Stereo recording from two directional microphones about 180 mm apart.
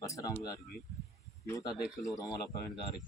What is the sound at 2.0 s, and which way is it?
Speech, 20° left (ahead or behind).